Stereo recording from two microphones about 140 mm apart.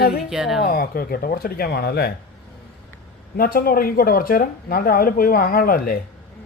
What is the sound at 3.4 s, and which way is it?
Speech, 90° left.